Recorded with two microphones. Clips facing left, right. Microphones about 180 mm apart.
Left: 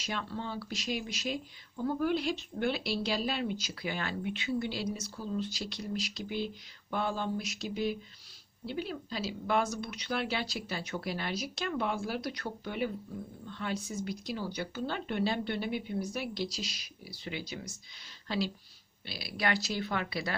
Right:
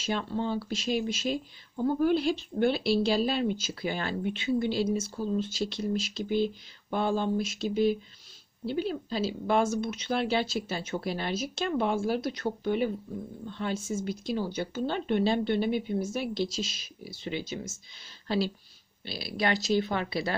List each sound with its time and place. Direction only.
0.0 s a woman's voice: 30° right (ahead or behind)